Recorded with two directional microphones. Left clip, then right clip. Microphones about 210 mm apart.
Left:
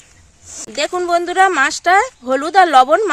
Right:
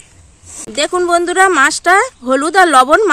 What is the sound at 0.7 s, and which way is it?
Speech, centre (ahead or behind).